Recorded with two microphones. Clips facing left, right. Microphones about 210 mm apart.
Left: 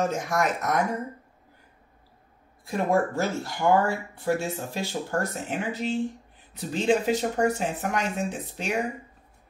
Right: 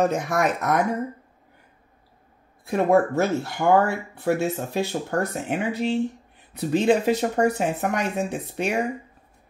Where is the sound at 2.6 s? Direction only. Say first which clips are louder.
Right 5 dB; 60° right (ahead or behind).